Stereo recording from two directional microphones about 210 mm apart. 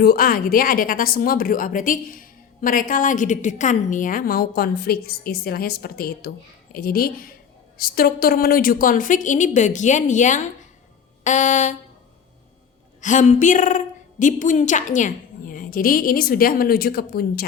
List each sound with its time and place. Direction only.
0.0 s a woman's voice: 45° left (ahead or behind)
13.0 s a woman's voice: 35° left (ahead or behind)